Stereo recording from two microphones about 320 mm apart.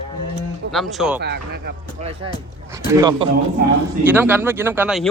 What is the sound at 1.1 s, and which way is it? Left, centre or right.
Speech, right.